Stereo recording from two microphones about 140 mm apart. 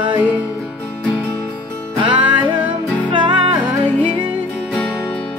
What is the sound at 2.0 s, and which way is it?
Music, 35° right (ahead or behind).